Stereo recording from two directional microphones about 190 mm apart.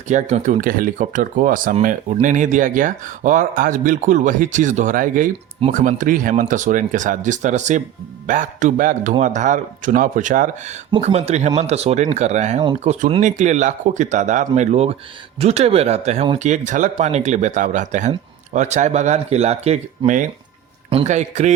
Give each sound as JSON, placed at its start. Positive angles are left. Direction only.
{"t": 0.1, "sound": "speech", "side_deg": -40}